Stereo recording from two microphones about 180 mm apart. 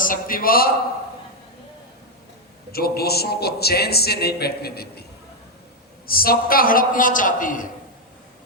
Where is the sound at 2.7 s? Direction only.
60° left (ahead or behind).